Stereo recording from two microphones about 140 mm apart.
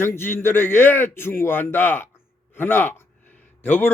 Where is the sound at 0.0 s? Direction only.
15° left (ahead or behind).